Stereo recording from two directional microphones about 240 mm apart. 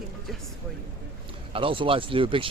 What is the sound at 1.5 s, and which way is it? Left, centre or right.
Speech, right.